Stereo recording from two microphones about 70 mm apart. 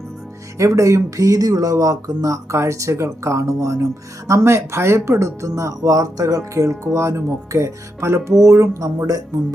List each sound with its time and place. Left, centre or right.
0.6 s speech: right